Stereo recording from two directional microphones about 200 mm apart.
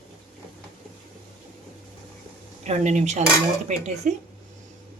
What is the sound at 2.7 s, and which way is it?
Speech, 35° right (ahead or behind).